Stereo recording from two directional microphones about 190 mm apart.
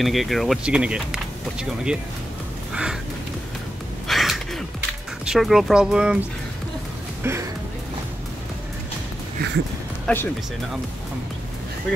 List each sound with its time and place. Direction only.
0.0 s speech: centre (ahead or behind)
4.1 s a sound: centre (ahead or behind)
5.2 s speech: centre (ahead or behind)
7.2 s speech: 10° right (ahead or behind)
10.1 s speech: 5° left (ahead or behind)